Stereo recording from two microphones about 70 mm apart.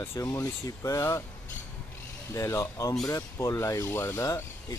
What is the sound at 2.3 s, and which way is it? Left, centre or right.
Speech, left.